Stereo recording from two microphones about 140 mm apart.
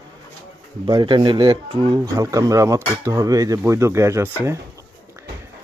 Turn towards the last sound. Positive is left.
turn(degrees=-20)  # may be behind; listen again after turning